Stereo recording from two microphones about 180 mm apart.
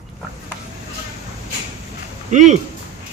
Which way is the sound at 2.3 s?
45° right (ahead or behind).